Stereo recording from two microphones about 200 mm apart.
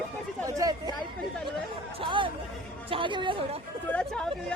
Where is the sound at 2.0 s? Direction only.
25° right (ahead or behind).